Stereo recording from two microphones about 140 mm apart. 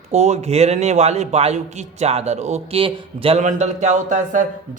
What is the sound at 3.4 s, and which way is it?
Speech, 60° right (ahead or behind).